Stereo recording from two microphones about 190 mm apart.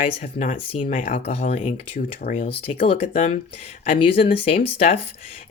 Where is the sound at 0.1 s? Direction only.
35° left (ahead or behind).